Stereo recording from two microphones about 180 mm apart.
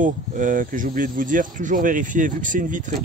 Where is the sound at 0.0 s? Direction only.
45° right (ahead or behind).